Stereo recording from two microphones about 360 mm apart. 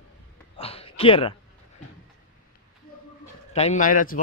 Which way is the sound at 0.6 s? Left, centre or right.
Centre.